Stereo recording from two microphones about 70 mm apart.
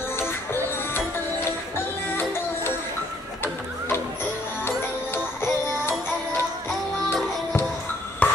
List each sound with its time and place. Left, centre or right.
2.0 s music: left
4.6 s music: left
8.2 s music: centre